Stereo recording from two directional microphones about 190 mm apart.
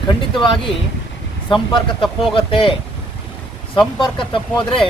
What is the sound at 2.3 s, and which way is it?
Speech, 25° left (ahead or behind).